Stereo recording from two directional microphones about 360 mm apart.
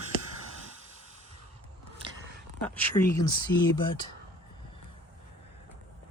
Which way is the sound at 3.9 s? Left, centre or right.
Centre.